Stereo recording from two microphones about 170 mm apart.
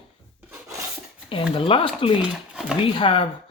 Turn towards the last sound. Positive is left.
turn(degrees=30)  # may be behind; listen again after turning